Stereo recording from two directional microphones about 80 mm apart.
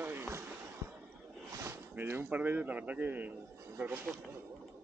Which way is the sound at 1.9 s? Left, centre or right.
Right.